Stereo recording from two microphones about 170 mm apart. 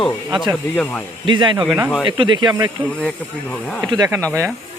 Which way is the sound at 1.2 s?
30° right (ahead or behind).